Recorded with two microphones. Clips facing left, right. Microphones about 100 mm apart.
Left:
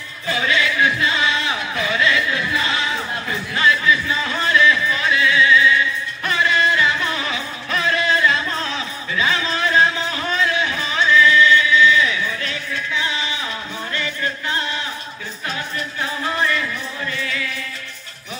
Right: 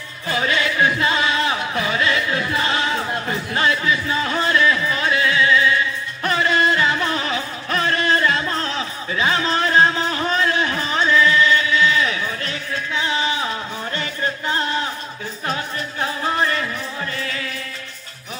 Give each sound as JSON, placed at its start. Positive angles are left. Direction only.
{"t": 0.3, "sound": "music", "side_deg": -40}
{"t": 16.0, "sound": "a sound", "side_deg": -40}
{"t": 17.1, "sound": "music", "side_deg": -40}